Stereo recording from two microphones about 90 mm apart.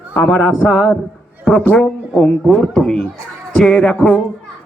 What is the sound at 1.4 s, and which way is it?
Speech, 20° left (ahead or behind).